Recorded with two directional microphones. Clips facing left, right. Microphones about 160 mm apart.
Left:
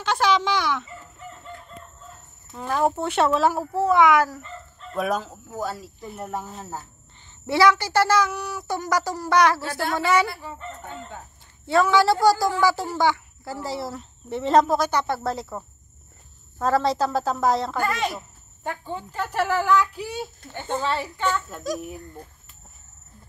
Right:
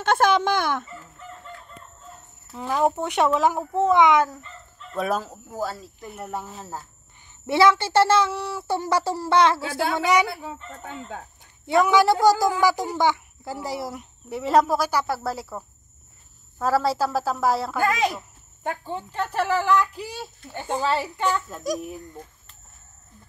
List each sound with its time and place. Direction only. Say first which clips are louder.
0.0 s a child's voice: right 2 dB; 55° right (ahead or behind)
2.5 s speech: right 1 dB; 10° right (ahead or behind)
4.9 s a woman's voice: even; centre (ahead or behind)
7.4 s speech: right 1 dB; 25° right (ahead or behind)
11.6 s a woman's voice: right 1 dB; 20° right (ahead or behind)
18.9 s a woman's voice: right 1 dB; centre (ahead or behind)
20.5 s speech: right 2 dB; 5° right (ahead or behind)